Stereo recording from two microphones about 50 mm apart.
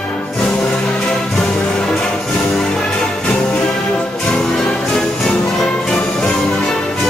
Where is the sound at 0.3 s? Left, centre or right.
Centre.